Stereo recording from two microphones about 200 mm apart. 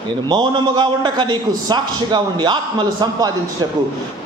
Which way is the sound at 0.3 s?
20° right (ahead or behind).